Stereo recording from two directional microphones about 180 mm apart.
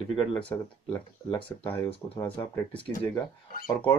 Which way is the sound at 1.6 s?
30° left (ahead or behind).